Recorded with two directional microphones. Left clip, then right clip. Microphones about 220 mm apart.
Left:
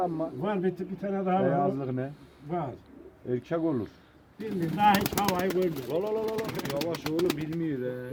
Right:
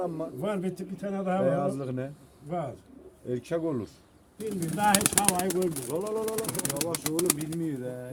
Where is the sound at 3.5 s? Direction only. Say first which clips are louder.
Left 1 dB; 35° right (ahead or behind).